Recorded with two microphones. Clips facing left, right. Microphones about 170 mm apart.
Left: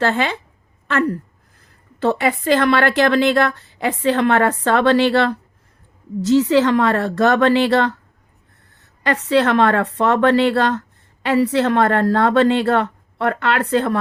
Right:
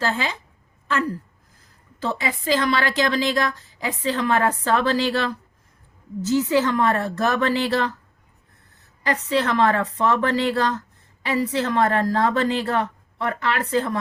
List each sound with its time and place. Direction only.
0.0 s a woman's voice: 65° left (ahead or behind)
6.2 s speech: 80° left
9.0 s speech: 75° left (ahead or behind)